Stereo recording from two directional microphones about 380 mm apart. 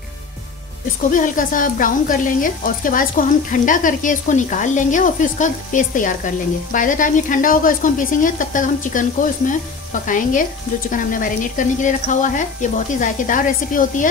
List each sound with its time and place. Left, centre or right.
1.1 s speech: left